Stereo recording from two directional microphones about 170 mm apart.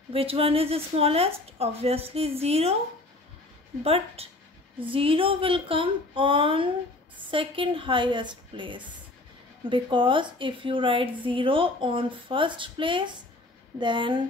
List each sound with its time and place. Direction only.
0.1 s speech: 35° right (ahead or behind)
3.8 s speech: 35° right (ahead or behind)